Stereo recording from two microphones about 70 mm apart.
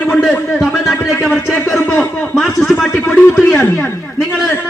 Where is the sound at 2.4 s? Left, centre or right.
Centre.